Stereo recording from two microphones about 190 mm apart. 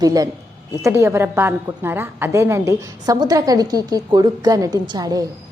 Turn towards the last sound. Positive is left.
turn(degrees=-20)  # may be behind; listen again after turning